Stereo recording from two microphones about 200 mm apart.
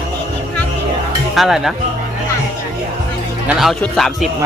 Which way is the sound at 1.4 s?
Centre (ahead or behind).